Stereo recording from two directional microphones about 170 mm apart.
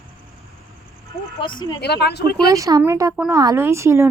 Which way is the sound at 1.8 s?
75° left (ahead or behind).